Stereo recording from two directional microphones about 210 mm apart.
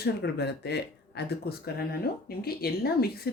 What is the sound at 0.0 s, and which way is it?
Speech, 50° left (ahead or behind).